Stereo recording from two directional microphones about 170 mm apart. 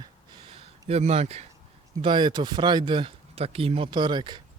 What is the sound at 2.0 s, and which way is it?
Speech, 30° right (ahead or behind).